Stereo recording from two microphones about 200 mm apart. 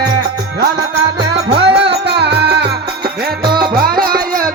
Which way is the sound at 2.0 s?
55° right (ahead or behind).